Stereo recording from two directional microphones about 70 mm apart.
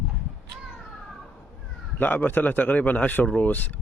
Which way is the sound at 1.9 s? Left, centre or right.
Left.